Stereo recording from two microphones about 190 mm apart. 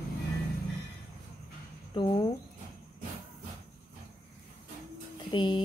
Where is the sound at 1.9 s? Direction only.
25° left (ahead or behind).